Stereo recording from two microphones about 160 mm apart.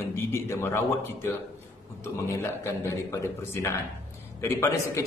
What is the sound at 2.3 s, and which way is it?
Speech, 20° left (ahead or behind).